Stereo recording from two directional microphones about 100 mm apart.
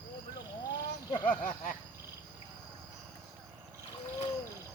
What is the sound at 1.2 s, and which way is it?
Speech, 15° left (ahead or behind).